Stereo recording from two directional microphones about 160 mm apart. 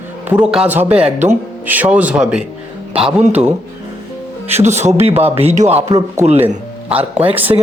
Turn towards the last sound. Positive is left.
turn(degrees=-25)  # may be behind; listen again after turning